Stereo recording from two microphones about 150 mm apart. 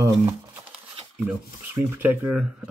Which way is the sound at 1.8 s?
15° right (ahead or behind).